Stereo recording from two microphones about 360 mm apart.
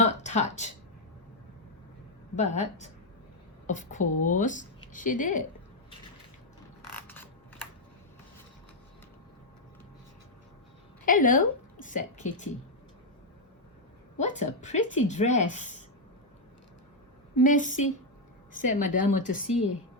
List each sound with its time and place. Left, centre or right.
0.0 s a sound: centre
2.3 s speech: centre
6.9 s mechanisms: centre
11.0 s a woman's voice: left
14.2 s speech: centre
17.3 s speech: left